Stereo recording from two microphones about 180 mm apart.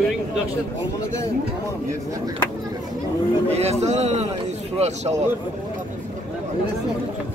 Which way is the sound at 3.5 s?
35° right (ahead or behind).